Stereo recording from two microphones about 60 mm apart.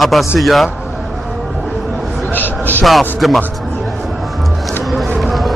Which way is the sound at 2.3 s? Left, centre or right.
Left.